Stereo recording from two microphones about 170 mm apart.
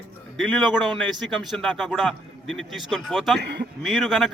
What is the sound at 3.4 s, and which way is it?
Speech, 80° right.